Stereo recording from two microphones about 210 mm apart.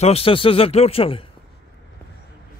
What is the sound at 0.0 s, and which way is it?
A man's voice, 25° left (ahead or behind).